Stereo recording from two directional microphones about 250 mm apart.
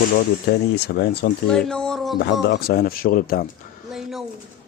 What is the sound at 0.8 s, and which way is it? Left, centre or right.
Speech, left.